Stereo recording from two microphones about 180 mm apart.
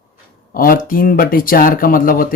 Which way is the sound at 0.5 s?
50° left (ahead or behind).